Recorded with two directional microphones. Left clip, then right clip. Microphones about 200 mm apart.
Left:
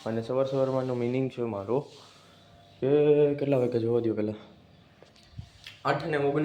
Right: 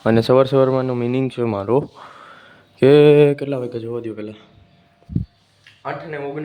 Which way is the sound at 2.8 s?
45° right (ahead or behind).